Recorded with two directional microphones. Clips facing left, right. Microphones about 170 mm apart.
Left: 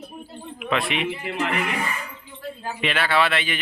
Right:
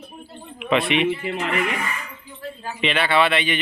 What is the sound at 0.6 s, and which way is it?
Speech, centre (ahead or behind).